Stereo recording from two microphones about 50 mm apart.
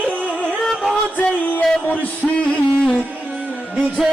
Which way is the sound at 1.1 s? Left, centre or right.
Left.